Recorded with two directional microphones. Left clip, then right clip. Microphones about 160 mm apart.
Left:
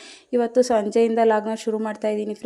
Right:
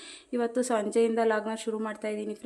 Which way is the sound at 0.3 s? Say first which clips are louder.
Left 9 dB; 35° left (ahead or behind).